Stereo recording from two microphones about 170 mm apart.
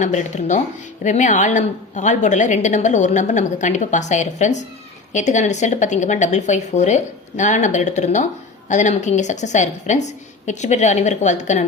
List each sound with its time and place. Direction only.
0.0 s a woman's voice: 45° left (ahead or behind)